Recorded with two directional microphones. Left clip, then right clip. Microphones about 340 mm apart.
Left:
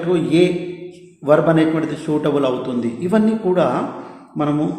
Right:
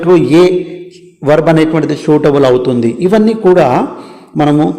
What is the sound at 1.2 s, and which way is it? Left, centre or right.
A man's voice, centre.